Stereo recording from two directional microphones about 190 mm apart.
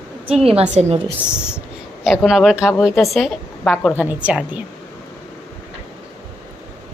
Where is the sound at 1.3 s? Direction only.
5° right (ahead or behind).